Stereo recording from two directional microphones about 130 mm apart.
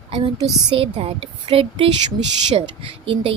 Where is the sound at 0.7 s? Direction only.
45° right (ahead or behind).